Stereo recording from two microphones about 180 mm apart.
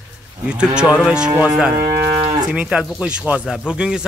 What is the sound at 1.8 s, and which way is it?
Moo, 25° right (ahead or behind).